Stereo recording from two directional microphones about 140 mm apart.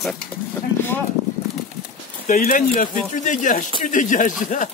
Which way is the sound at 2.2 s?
75° left (ahead or behind).